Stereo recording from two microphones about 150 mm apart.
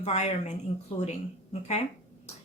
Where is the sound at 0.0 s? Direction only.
45° left (ahead or behind).